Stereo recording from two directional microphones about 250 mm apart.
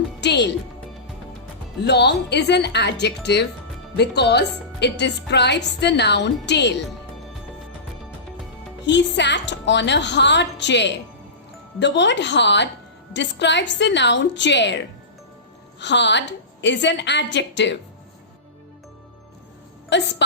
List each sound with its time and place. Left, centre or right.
0.2 s speech: left
1.8 s a woman's voice: left
8.9 s a woman's voice: left
19.9 s a woman's voice: left